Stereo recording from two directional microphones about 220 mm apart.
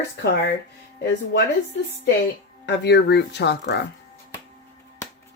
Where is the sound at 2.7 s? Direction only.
50° left (ahead or behind).